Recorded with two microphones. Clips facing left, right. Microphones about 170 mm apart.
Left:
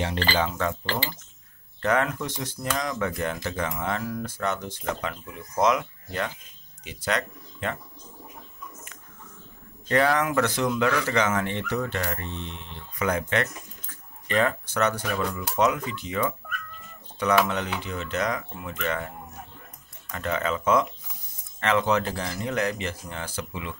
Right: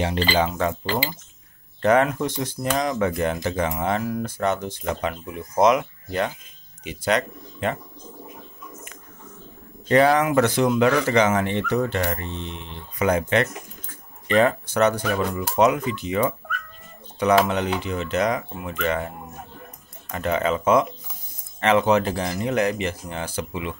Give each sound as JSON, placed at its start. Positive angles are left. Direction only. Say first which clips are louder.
{"t": 0.0, "sound": "speech", "louder": "right 4 dB", "side_deg": -15}
{"t": 9.8, "sound": "speech", "louder": "right 5 dB", "side_deg": -20}
{"t": 17.5, "sound": "speech", "louder": "right 5 dB", "side_deg": -20}